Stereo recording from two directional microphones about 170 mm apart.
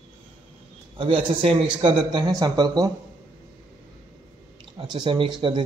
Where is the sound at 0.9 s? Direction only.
35° right (ahead or behind).